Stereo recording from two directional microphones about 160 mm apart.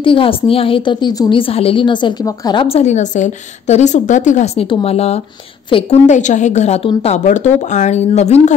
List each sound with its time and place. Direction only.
0.0 s a woman's voice: 35° left (ahead or behind)
6.0 s a woman's voice: 50° left (ahead or behind)